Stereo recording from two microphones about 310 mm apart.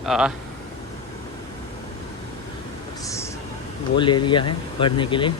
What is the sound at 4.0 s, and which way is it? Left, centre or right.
A man's voice, centre.